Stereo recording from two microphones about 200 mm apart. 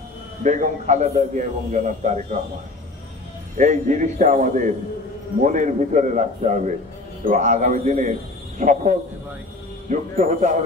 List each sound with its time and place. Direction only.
0.4 s a man's voice: 40° right (ahead or behind)
3.5 s a man's voice: 40° right (ahead or behind)